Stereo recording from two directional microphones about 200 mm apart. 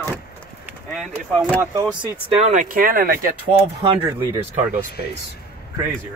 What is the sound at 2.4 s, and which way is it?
Speech, 40° right (ahead or behind).